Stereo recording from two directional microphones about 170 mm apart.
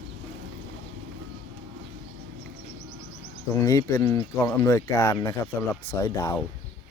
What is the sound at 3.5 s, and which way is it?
Speech, 20° left (ahead or behind).